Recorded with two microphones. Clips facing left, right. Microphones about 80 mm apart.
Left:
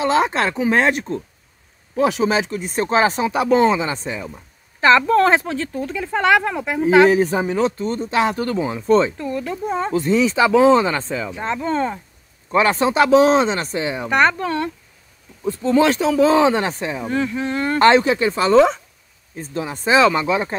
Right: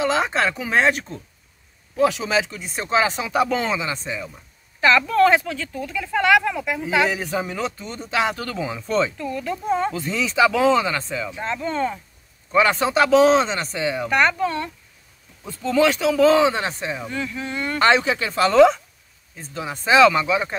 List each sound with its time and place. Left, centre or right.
0.0 s speech: left
2.0 s speech: left
13.8 s speech: left
14.4 s speech: left
15.4 s speech: left